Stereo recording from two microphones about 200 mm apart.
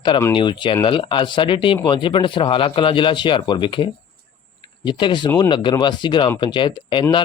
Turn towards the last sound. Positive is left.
turn(degrees=25)  # may be behind; listen again after turning